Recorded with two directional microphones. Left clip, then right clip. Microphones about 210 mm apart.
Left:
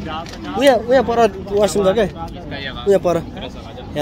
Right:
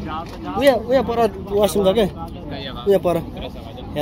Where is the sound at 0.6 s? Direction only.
30° left (ahead or behind).